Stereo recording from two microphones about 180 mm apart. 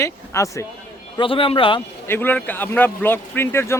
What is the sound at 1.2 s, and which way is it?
Speech, 30° left (ahead or behind).